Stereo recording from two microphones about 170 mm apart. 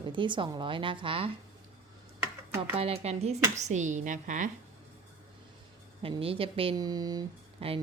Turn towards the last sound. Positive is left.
turn(degrees=-25)  # may be behind; listen again after turning